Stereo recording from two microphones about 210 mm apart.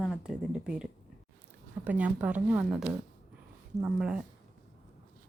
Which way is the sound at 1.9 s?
5° right (ahead or behind).